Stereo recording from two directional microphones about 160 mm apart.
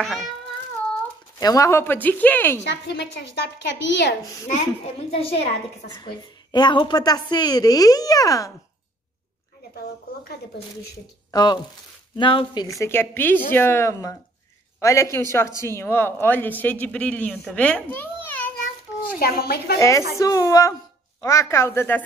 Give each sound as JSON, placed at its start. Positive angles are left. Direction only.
{"t": 0.0, "sound": "a sound", "side_deg": 0}
{"t": 1.4, "sound": "a man's voice", "side_deg": 20}
{"t": 2.7, "sound": "a woman's voice", "side_deg": 90}
{"t": 5.1, "sound": "a woman's voice", "side_deg": 40}
{"t": 6.5, "sound": "speech", "side_deg": 30}
{"t": 11.3, "sound": "a woman's voice", "side_deg": 25}
{"t": 12.6, "sound": "a man's voice", "side_deg": 20}
{"t": 17.6, "sound": "babbling", "side_deg": 10}
{"t": 19.1, "sound": "a woman's voice", "side_deg": 70}
{"t": 20.2, "sound": "a man's voice", "side_deg": 20}